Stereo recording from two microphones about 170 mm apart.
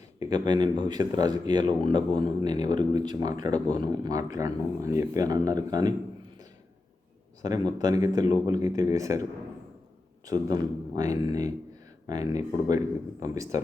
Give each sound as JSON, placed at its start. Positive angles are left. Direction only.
{"t": 0.2, "sound": "speech", "side_deg": -25}
{"t": 7.4, "sound": "speech", "side_deg": -20}
{"t": 10.2, "sound": "speech", "side_deg": -20}